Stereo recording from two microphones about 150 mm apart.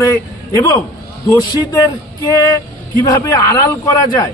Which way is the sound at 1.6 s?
20° left (ahead or behind).